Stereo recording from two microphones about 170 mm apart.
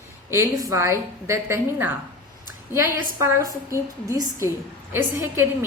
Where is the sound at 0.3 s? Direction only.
20° right (ahead or behind).